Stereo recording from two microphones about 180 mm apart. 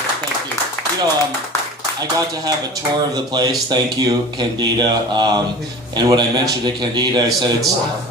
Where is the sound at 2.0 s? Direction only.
20° right (ahead or behind).